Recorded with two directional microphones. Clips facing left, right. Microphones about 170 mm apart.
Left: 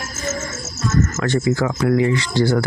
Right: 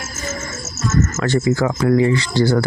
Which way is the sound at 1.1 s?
30° right (ahead or behind).